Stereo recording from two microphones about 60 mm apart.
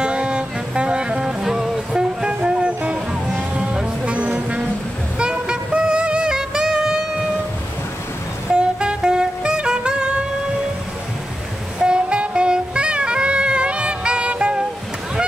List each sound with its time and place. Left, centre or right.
0.0 s music: centre
4.3 s brass instrument: right
5.2 s music: centre
8.5 s music: centre
11.8 s saxophone: centre